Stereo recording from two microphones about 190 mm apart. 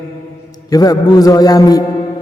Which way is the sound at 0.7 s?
20° left (ahead or behind).